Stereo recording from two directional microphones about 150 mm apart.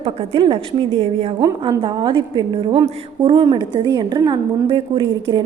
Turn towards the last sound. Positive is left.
turn(degrees=-35)  # may be behind; listen again after turning